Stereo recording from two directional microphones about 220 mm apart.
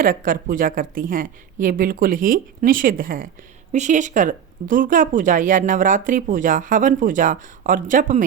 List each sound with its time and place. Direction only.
0.0 s speech: 40° right (ahead or behind)